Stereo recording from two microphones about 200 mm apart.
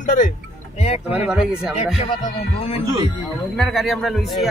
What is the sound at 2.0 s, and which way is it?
Music, 30° left (ahead or behind).